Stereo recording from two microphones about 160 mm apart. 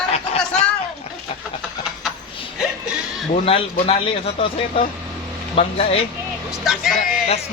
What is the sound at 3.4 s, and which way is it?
Speech, 35° left (ahead or behind).